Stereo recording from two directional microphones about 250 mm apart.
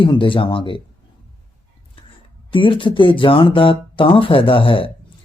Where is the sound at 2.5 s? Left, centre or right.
Left.